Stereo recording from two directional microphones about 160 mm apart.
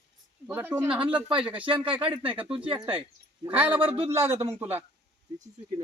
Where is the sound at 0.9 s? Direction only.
35° right (ahead or behind).